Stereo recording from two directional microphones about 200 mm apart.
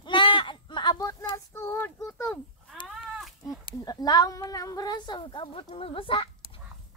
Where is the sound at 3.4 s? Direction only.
20° left (ahead or behind).